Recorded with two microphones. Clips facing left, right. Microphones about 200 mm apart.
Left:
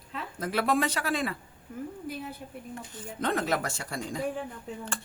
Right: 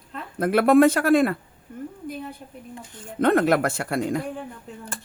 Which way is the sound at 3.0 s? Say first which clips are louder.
Right 11 dB; 60° right (ahead or behind).